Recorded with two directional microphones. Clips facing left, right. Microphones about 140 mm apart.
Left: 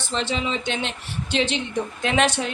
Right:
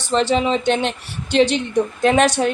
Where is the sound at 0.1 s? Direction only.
45° right (ahead or behind).